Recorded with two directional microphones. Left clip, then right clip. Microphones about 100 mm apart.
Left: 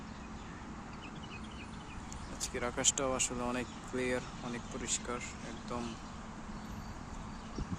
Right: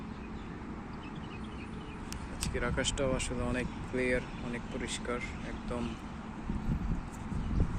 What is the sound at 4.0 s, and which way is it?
Speech, 45° left (ahead or behind).